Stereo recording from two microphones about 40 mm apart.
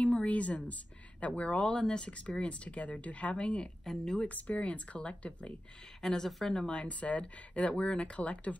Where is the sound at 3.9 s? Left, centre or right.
Centre.